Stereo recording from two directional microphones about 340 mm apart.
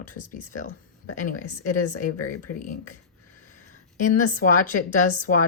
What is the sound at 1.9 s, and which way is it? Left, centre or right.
Speech, left.